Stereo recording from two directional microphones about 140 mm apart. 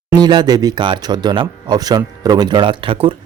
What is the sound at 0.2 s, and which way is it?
Speech, 30° right (ahead or behind).